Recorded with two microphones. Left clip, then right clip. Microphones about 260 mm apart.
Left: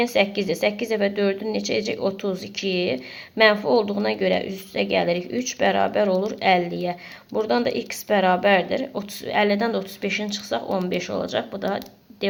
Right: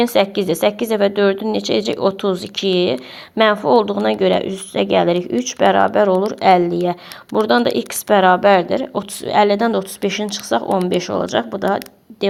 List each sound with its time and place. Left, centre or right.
0.1 s speech: right
2.3 s speech: centre
2.6 s speech: right